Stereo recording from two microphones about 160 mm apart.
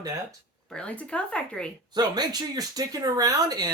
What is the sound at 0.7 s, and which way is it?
Speech, 5° left (ahead or behind).